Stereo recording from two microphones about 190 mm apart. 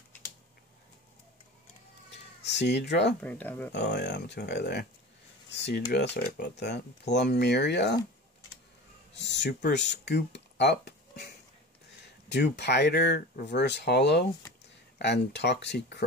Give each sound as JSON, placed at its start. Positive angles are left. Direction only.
{"t": 2.4, "sound": "speech", "side_deg": 65}
{"t": 3.2, "sound": "speech", "side_deg": 10}
{"t": 3.7, "sound": "speech", "side_deg": 65}
{"t": 9.1, "sound": "speech", "side_deg": 65}